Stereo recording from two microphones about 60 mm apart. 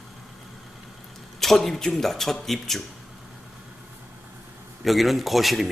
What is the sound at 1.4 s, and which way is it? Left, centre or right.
A man's voice, centre.